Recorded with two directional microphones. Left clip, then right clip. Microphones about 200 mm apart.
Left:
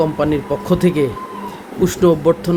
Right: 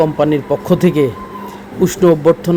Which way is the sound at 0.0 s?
20° right (ahead or behind).